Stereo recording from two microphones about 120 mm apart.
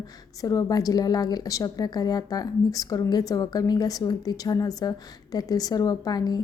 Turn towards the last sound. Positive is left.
turn(degrees=35)  # may be behind; listen again after turning